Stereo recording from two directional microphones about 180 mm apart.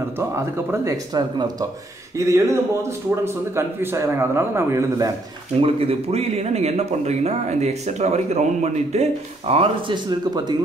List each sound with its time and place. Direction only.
0.7 s a man's voice: 20° right (ahead or behind)
5.6 s speech: 35° right (ahead or behind)